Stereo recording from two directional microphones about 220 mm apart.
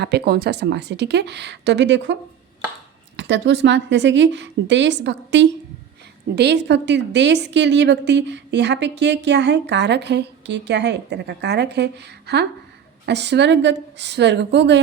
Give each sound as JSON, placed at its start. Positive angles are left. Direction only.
{"t": 0.0, "sound": "a woman's voice", "side_deg": -50}
{"t": 3.2, "sound": "a woman's voice", "side_deg": -50}